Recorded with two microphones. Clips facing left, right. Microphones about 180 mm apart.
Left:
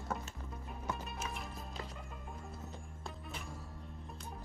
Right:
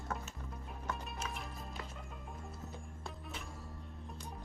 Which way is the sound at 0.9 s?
5° left (ahead or behind).